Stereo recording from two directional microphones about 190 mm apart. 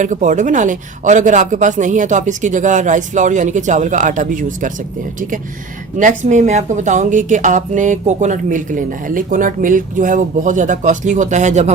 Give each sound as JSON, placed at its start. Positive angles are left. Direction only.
{"t": 0.0, "sound": "a woman's voice", "side_deg": -40}
{"t": 6.0, "sound": "a woman's voice", "side_deg": -40}